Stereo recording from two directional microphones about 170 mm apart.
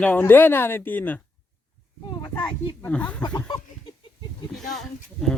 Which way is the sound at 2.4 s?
10° left (ahead or behind).